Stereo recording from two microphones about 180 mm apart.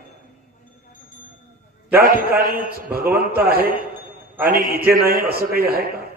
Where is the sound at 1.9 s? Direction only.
55° right (ahead or behind).